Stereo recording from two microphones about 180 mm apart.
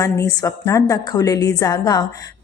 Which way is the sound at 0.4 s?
15° left (ahead or behind).